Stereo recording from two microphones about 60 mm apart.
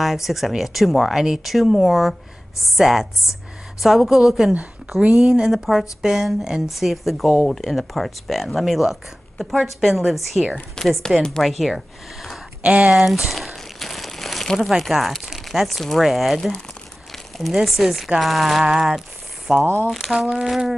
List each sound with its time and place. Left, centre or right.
0.0 s speech: centre
12.6 s speech: right
12.9 s crumpling: centre
14.8 s speech: centre
19.6 s speech: right
19.9 s speech: centre